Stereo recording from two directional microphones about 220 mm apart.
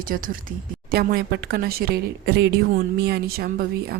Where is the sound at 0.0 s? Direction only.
40° right (ahead or behind).